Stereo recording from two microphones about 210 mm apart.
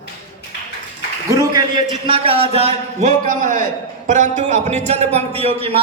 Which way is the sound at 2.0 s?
25° right (ahead or behind).